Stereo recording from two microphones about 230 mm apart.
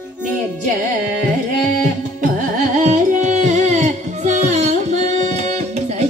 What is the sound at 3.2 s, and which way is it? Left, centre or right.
Music, right.